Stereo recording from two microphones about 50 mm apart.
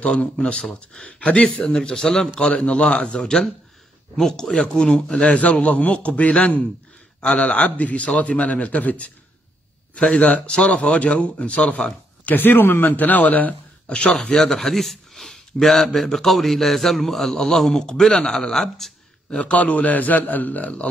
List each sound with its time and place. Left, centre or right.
0.0 s a man's voice: centre
2.5 s a man's voice: left
3.2 s speech: centre
5.2 s a man's voice: left
12.3 s speech: left
12.9 s a man's voice: left
14.4 s speech: centre
19.3 s a man's voice: left